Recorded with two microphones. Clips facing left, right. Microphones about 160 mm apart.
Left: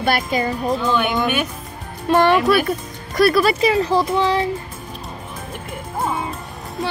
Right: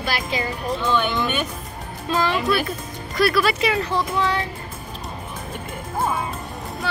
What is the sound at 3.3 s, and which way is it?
Speech, 40° left (ahead or behind).